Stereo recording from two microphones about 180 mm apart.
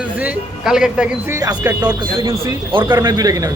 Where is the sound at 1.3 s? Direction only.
20° right (ahead or behind).